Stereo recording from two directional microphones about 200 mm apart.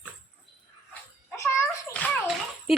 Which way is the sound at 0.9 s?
15° left (ahead or behind).